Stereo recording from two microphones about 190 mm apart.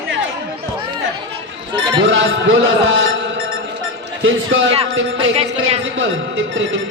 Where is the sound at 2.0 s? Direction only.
80° right.